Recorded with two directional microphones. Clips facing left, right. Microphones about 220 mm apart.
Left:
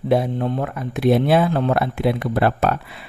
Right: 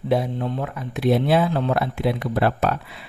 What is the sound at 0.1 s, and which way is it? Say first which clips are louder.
Speech: left 3 dB; 55° left (ahead or behind).